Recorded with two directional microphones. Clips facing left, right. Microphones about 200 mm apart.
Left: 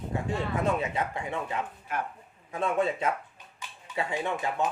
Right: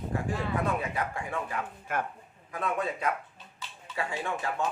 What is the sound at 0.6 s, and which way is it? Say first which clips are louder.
Speech: left 2 dB; 25° left (ahead or behind).